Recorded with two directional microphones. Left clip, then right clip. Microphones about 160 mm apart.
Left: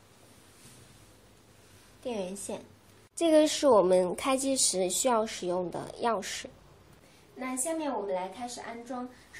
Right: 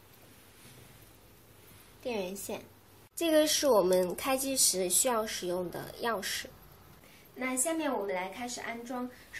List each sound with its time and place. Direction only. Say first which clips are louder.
2.0 s speech: even; 25° left (ahead or behind)
7.3 s a woman's voice: right 1 dB; centre (ahead or behind)